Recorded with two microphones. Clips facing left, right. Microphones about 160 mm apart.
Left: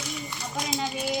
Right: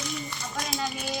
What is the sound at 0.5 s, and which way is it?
Speech, 20° left (ahead or behind).